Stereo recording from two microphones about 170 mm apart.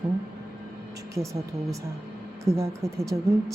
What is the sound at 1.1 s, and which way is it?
Speech, 20° right (ahead or behind).